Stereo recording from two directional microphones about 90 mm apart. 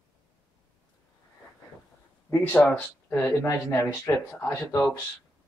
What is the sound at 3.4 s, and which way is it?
Speech, 35° left (ahead or behind).